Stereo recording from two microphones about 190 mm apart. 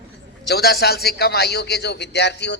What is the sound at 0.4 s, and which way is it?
A man's voice, 55° left (ahead or behind).